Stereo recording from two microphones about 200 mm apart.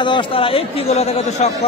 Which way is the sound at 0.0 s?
25° left (ahead or behind).